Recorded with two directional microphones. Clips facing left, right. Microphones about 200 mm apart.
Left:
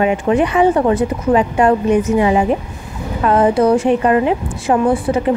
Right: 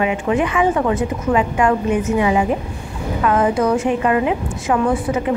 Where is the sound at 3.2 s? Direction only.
35° left (ahead or behind).